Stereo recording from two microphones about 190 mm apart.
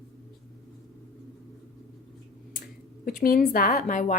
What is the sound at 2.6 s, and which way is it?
Speech, 50° left (ahead or behind).